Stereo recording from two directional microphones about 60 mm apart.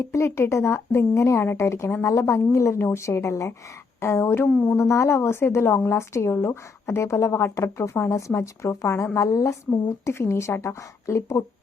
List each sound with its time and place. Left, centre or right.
0.0 s a woman's voice: left
2.0 s a woman's voice: left
4.0 s a woman's voice: left
4.4 s a sound: left
4.8 s a woman's voice: left
10.1 s a woman's voice: left